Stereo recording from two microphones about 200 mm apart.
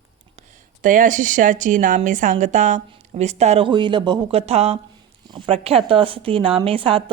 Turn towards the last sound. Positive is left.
turn(degrees=-25)  # may be behind; listen again after turning